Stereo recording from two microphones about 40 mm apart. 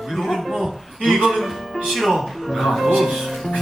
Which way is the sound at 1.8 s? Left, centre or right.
Centre.